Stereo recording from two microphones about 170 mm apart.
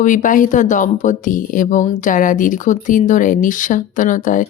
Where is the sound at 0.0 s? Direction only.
50° left (ahead or behind).